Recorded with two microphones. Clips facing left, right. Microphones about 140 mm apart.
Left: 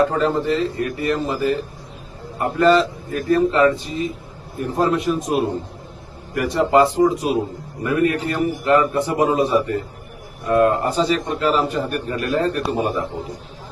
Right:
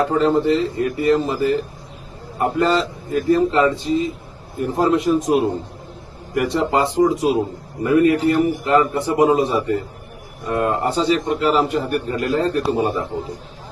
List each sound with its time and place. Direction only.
0.2 s a man's voice: 20° right (ahead or behind)